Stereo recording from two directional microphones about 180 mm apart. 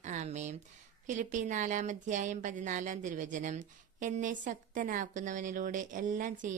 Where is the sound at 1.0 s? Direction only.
45° right (ahead or behind).